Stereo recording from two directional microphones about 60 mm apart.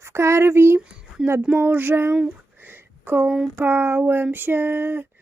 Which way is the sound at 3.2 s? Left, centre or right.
Centre.